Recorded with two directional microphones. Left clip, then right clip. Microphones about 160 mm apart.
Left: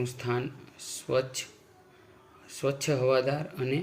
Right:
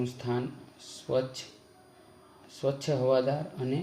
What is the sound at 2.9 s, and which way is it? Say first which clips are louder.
Speech: even; 15° left (ahead or behind).